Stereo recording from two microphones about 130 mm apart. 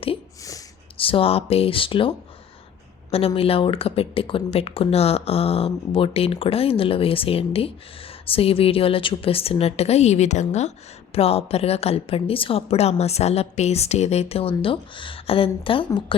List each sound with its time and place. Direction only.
0.9 s a woman's voice: 45° left (ahead or behind); by 10.7 s 60° left (ahead or behind)
11.1 s a woman's voice: 50° left (ahead or behind)